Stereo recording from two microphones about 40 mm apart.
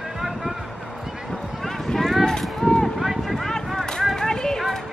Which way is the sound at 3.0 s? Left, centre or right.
Centre.